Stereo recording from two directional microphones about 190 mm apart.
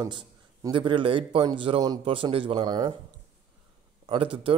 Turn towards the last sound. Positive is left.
turn(degrees=-30)  # may be behind; listen again after turning